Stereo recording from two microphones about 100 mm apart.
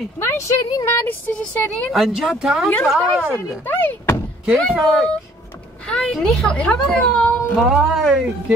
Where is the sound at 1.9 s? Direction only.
Centre (ahead or behind).